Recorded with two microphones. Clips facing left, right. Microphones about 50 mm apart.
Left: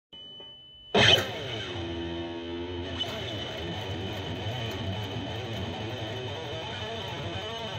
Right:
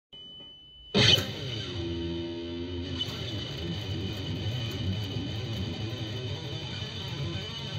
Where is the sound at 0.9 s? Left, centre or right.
Left.